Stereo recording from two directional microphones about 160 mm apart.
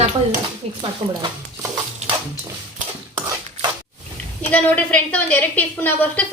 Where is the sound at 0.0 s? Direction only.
35° right (ahead or behind).